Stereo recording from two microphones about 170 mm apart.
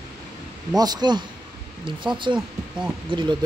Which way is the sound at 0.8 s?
25° right (ahead or behind).